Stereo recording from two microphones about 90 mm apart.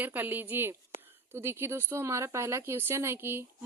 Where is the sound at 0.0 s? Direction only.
20° right (ahead or behind).